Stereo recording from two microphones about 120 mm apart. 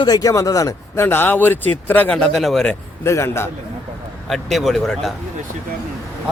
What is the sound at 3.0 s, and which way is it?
Speech, 25° left (ahead or behind).